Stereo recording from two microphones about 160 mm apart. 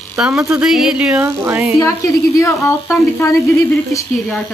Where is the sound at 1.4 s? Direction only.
15° right (ahead or behind).